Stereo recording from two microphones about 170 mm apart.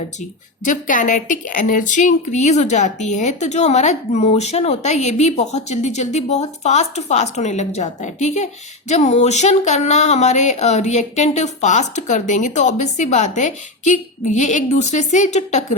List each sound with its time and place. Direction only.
0.2 s speech: 50° left (ahead or behind)